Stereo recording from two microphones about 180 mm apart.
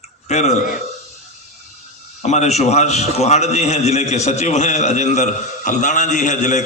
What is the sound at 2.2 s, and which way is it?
A man's voice, 40° left (ahead or behind).